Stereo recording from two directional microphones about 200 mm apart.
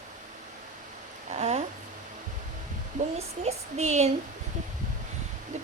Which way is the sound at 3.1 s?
35° right (ahead or behind).